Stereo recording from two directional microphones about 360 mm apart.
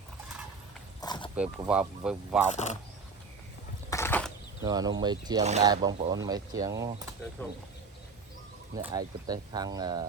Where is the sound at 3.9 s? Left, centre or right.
Centre.